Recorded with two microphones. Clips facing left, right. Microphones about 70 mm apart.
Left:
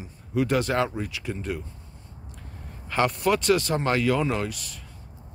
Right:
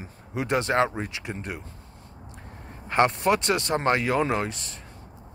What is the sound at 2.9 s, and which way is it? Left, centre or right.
Speech, right.